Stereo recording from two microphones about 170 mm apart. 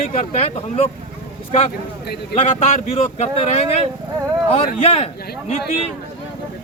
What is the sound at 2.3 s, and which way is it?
Speech, 40° left (ahead or behind).